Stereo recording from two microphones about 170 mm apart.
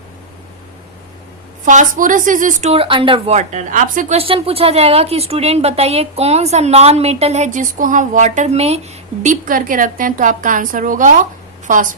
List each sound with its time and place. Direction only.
1.6 s speech: 50° right (ahead or behind)
9.2 s a woman's voice: 55° right (ahead or behind)